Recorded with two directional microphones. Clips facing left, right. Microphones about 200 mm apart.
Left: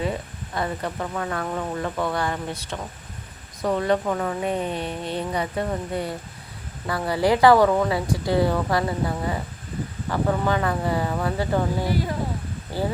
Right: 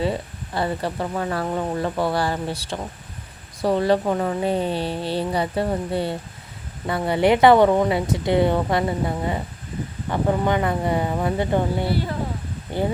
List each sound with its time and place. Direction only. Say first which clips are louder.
0.0 s speech: right 3 dB; 30° right (ahead or behind)